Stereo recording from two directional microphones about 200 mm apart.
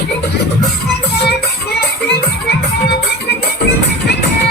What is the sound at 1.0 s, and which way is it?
Music, 55° left (ahead or behind).